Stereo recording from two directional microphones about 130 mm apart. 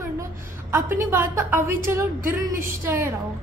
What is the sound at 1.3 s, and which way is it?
A woman's voice, 15° right (ahead or behind).